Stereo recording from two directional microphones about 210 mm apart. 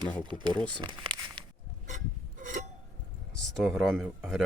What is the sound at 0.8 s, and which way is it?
Crumpling, 20° right (ahead or behind).